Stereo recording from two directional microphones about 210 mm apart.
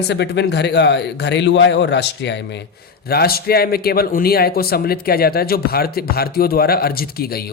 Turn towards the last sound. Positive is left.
turn(degrees=45)  # may be behind; listen again after turning